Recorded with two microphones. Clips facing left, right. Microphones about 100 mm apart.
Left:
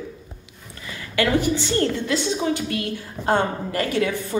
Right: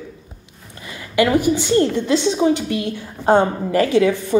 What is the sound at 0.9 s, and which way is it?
A woman's voice, 15° right (ahead or behind).